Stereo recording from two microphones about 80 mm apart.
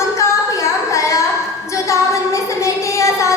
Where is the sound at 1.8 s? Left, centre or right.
Left.